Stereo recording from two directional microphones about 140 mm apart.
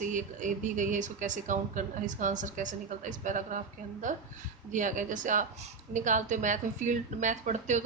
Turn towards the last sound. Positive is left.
turn(degrees=-60)  # may be behind; listen again after turning